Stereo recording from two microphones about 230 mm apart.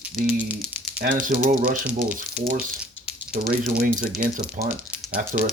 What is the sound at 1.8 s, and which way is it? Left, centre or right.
Speech, centre.